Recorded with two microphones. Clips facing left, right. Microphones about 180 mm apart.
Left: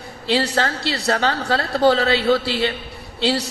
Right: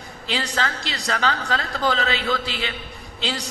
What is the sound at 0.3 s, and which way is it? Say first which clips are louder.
A woman's voice: left 6 dB; 35° left (ahead or behind).